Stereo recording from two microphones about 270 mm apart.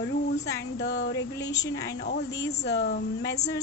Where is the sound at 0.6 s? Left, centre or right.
Left.